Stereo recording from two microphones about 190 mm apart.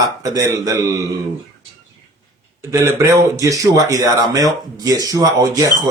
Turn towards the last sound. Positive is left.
turn(degrees=-20)  # may be behind; listen again after turning